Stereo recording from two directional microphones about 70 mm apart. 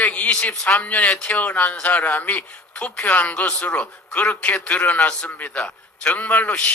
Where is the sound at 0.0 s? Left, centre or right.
Centre.